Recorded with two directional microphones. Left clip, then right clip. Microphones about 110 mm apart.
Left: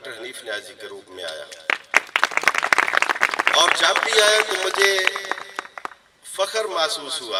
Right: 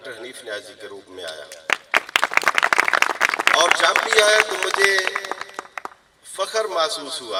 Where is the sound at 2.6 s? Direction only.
45° right (ahead or behind).